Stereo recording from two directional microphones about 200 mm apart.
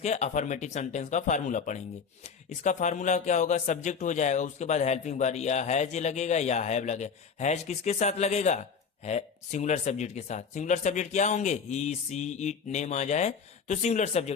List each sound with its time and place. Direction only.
0.0 s speech: 35° left (ahead or behind)